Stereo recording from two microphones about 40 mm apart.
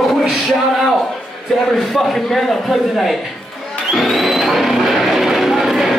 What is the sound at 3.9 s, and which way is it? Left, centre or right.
Music, centre.